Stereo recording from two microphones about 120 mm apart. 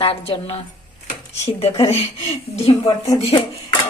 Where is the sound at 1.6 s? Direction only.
55° left (ahead or behind).